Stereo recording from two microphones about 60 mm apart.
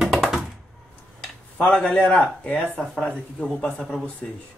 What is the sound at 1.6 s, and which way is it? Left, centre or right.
Speech, centre.